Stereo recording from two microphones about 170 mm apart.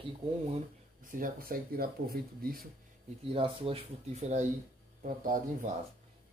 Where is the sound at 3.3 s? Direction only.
35° right (ahead or behind); by 5.7 s 50° right (ahead or behind).